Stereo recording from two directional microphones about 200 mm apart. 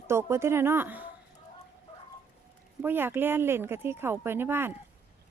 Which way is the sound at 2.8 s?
10° right (ahead or behind).